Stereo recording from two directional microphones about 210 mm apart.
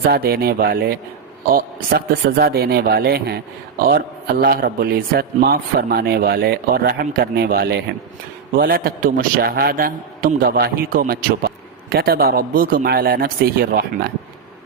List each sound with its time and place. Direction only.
0.1 s a man's voice: 45° right (ahead or behind)